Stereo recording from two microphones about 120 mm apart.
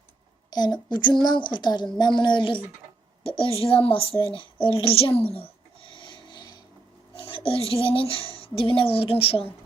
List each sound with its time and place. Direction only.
0.5 s a woman's voice: 35° left (ahead or behind); by 5.2 s 55° left (ahead or behind)
5.3 s a sound: 50° left (ahead or behind)
7.2 s speech: 45° left (ahead or behind)